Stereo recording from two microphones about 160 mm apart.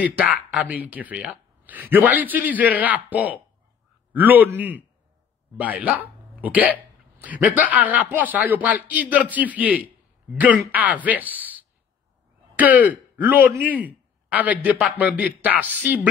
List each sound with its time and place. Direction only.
0.0 s speech: 10° right (ahead or behind)
12.5 s throat clearing: 10° right (ahead or behind)
13.2 s speech: 10° right (ahead or behind)